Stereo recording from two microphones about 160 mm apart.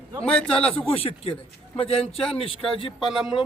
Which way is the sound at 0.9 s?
35° left (ahead or behind).